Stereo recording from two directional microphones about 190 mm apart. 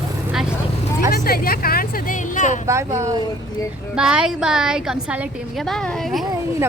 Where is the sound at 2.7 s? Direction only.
15° right (ahead or behind).